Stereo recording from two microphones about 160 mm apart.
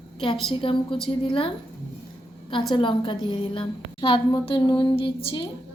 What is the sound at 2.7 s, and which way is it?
A woman's voice, 30° left (ahead or behind).